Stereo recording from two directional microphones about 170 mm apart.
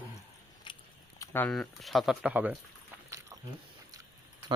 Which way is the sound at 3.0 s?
20° right (ahead or behind).